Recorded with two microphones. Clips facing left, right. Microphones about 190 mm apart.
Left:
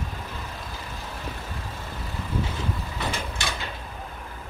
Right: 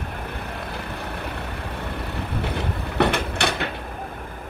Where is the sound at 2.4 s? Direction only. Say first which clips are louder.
Right 4 dB; 65° right (ahead or behind).